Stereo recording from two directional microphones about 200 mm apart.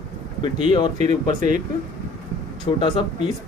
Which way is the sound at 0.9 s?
35° right (ahead or behind).